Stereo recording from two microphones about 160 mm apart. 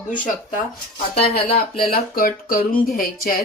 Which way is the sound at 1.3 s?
70° left (ahead or behind).